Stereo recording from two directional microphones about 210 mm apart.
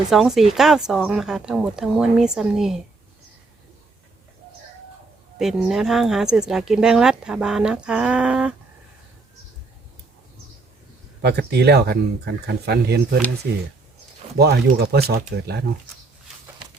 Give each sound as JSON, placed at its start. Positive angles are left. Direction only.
{"t": 0.1, "sound": "speech", "side_deg": 0}
{"t": 5.4, "sound": "speech", "side_deg": 0}
{"t": 11.2, "sound": "speech", "side_deg": -50}